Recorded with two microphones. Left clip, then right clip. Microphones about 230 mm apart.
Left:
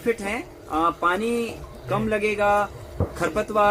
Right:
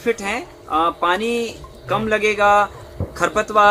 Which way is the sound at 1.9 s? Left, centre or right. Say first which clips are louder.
Right 5 dB; right.